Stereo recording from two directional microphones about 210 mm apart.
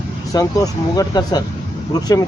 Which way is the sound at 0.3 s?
15° left (ahead or behind).